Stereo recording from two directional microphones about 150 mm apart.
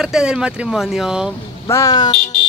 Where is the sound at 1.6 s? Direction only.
20° left (ahead or behind).